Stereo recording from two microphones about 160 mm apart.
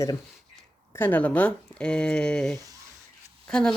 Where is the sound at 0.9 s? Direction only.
10° left (ahead or behind).